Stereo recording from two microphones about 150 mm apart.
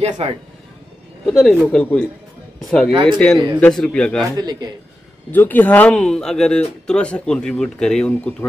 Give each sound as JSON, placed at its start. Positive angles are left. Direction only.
{"t": 0.2, "sound": "speech", "side_deg": -40}
{"t": 1.2, "sound": "speech", "side_deg": 0}
{"t": 2.9, "sound": "speech", "side_deg": -40}
{"t": 3.2, "sound": "speech", "side_deg": 5}
{"t": 4.4, "sound": "speech", "side_deg": -25}
{"t": 5.3, "sound": "speech", "side_deg": 10}